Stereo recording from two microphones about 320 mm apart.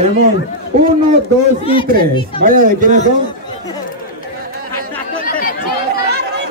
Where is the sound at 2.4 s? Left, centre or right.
Right.